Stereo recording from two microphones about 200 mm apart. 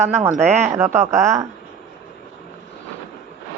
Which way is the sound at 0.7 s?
15° right (ahead or behind).